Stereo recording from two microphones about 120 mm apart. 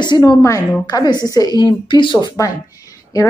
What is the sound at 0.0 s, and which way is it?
A woman's voice, 35° left (ahead or behind).